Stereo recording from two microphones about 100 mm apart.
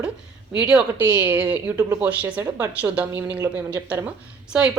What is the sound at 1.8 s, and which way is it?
Speech, 30° right (ahead or behind).